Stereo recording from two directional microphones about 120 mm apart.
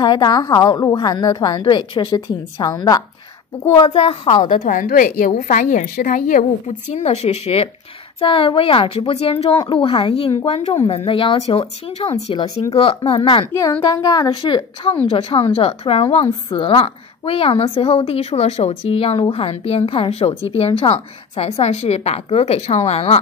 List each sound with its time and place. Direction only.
0.0 s a woman's voice: 35° left (ahead or behind)
3.8 s a woman's voice: 50° left (ahead or behind)
8.2 s a woman's voice: 50° left (ahead or behind)
12.7 s a woman's voice: 50° left (ahead or behind)
13.5 s a woman's voice: 30° left (ahead or behind); by 16.3 s 55° left (ahead or behind)
16.4 s a woman's voice: 45° left (ahead or behind)